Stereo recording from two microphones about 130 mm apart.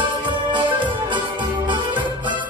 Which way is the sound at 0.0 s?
40° right (ahead or behind).